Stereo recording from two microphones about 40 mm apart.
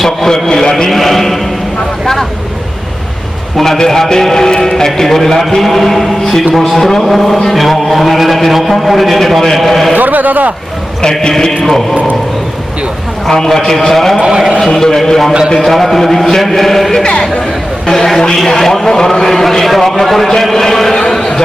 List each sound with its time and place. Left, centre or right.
0.0 s a sound: centre
0.4 s a man's voice: centre
0.9 s a man's voice: centre
3.6 s a man's voice: centre
9.9 s a man's voice: right
11.2 s a man's voice: centre
13.3 s a man's voice: centre
14.2 s a man's voice: centre
14.6 s a man's voice: centre
17.0 s a man's voice: centre
21.1 s a sound: centre